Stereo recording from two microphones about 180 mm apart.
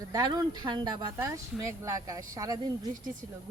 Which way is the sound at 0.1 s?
20° right (ahead or behind).